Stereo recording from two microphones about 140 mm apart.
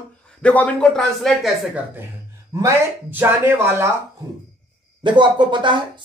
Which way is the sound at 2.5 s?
15° right (ahead or behind).